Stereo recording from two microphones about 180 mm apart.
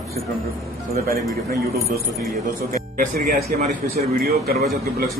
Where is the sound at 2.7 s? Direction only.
50° right (ahead or behind).